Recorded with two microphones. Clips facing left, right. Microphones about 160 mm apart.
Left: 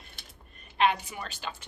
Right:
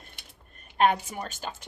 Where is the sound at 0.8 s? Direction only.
45° right (ahead or behind).